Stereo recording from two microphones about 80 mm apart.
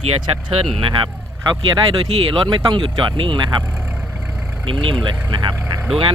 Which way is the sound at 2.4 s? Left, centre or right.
Right.